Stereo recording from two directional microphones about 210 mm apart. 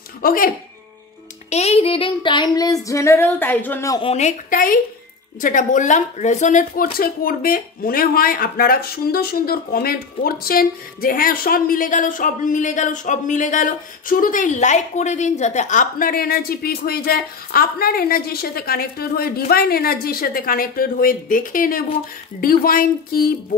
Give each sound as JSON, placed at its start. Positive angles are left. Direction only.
{"t": 0.2, "sound": "speech", "side_deg": 45}
{"t": 1.5, "sound": "child singing", "side_deg": 30}
{"t": 4.1, "sound": "a woman's voice", "side_deg": 35}